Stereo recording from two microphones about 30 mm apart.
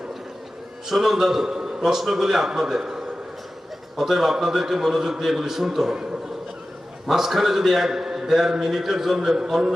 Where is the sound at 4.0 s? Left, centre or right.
Centre.